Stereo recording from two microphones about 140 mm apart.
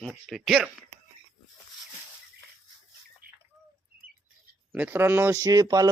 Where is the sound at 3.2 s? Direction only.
90° right.